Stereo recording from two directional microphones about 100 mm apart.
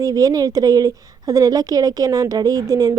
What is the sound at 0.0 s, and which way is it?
A woman's voice, 35° right (ahead or behind).